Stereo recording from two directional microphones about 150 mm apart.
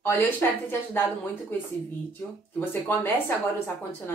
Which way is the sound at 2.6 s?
15° left (ahead or behind).